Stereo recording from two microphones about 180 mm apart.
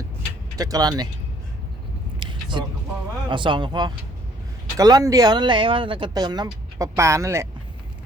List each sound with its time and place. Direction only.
0.5 s speech: 20° right (ahead or behind)
2.1 s vehicle: 25° right (ahead or behind)
3.2 s speech: 25° right (ahead or behind)